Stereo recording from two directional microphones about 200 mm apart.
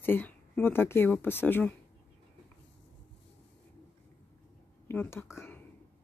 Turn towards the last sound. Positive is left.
turn(degrees=10)  # may be behind; listen again after turning